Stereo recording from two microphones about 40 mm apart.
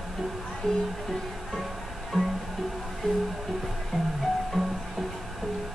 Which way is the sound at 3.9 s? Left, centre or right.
Centre.